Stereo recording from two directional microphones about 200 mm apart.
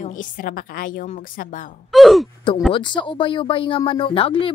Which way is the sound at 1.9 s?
Centre (ahead or behind).